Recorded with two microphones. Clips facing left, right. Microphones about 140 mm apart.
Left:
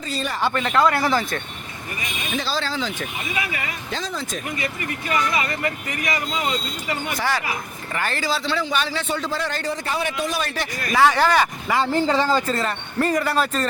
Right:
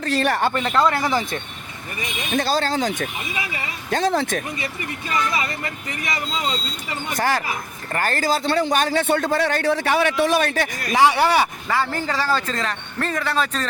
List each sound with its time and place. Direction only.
0.0 s a man's voice: 60° right (ahead or behind)
0.9 s speech: 20° right (ahead or behind)
2.3 s speech: 50° right (ahead or behind)
3.9 s a man's voice: 60° right (ahead or behind)
7.9 s a man's voice: 45° right (ahead or behind)
10.9 s speech: 10° right (ahead or behind)
11.7 s speech: 15° left (ahead or behind)